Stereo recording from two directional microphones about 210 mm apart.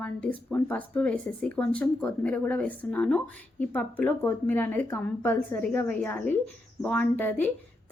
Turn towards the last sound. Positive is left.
turn(degrees=10)  # may be behind; listen again after turning